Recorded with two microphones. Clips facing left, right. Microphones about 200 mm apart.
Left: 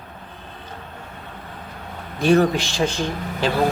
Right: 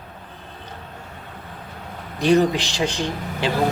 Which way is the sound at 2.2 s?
15° right (ahead or behind).